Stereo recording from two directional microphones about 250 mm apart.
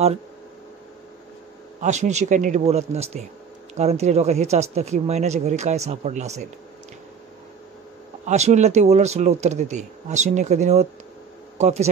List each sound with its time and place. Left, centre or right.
1.8 s speech: right
8.3 s speech: right